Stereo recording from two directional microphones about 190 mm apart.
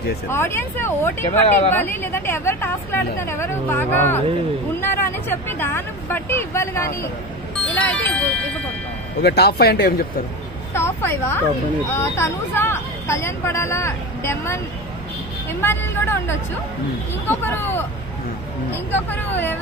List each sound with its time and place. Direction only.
0.3 s speech: 15° left (ahead or behind)
9.2 s speech: 55° left (ahead or behind)
10.7 s speech: 15° left (ahead or behind)
15.6 s speech: 10° left (ahead or behind)